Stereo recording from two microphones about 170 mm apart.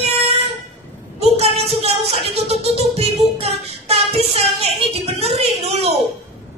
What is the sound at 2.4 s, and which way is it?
Music, 35° right (ahead or behind).